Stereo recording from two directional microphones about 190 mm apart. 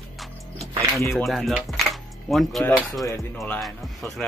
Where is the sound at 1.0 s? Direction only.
15° left (ahead or behind).